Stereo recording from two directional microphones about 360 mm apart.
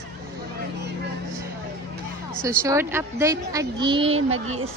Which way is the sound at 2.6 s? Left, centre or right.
Centre.